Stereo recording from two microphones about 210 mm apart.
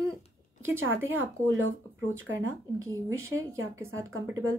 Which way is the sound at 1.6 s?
65° right (ahead or behind).